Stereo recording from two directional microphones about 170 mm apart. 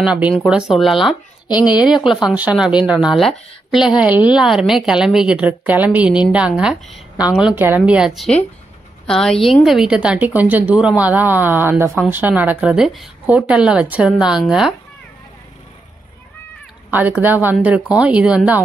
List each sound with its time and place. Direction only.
0.0 s a woman's voice: 5° right (ahead or behind)
1.9 s speech: 25° left (ahead or behind)
2.2 s a woman's voice: 5° right (ahead or behind)
16.9 s a woman's voice: 10° right (ahead or behind)